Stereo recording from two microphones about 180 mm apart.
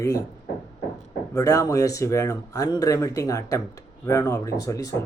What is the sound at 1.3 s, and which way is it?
Speech, 15° left (ahead or behind).